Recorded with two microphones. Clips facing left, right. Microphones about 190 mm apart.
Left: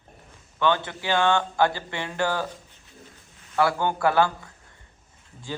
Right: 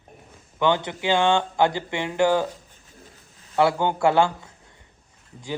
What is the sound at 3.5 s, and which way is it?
A man's voice, 20° right (ahead or behind).